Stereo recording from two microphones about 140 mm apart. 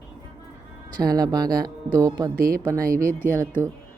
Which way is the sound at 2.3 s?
90° right.